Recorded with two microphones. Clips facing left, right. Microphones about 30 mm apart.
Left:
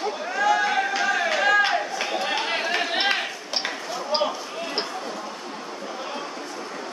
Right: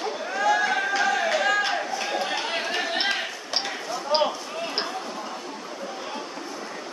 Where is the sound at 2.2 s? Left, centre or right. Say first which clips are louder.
Left 2 dB; left.